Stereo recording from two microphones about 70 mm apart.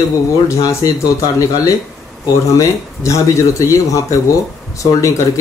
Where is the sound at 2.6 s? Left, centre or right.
Left.